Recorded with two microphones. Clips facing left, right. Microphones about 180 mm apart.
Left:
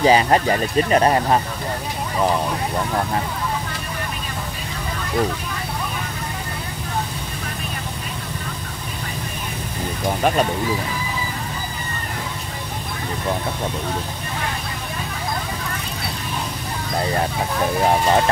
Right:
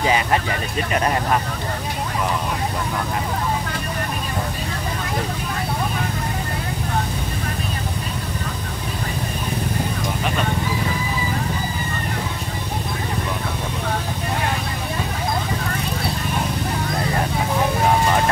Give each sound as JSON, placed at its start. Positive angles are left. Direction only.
{"t": 0.0, "sound": "speech", "side_deg": 35}